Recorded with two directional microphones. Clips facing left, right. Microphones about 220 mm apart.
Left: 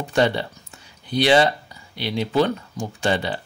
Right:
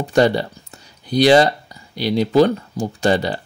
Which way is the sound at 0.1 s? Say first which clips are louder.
Right 5 dB; 40° right (ahead or behind).